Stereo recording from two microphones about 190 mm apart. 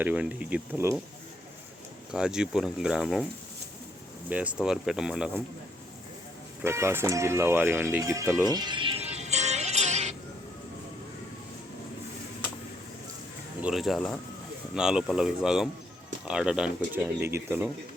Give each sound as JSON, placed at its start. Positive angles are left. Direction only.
{"t": 0.0, "sound": "speech", "side_deg": -5}
{"t": 2.1, "sound": "speech", "side_deg": -5}
{"t": 4.3, "sound": "speech", "side_deg": -5}
{"t": 6.6, "sound": "music", "side_deg": -15}
{"t": 13.6, "sound": "speech", "side_deg": -5}